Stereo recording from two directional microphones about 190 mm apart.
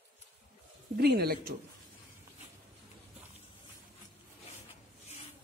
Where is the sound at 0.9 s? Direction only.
55° right (ahead or behind).